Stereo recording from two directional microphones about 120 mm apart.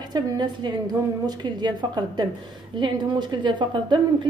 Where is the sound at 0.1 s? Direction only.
40° right (ahead or behind).